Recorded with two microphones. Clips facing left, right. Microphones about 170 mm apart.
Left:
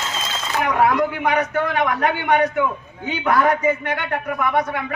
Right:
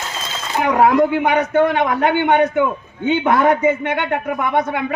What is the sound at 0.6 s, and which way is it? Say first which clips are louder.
A man's voice: right 5 dB; 30° right (ahead or behind).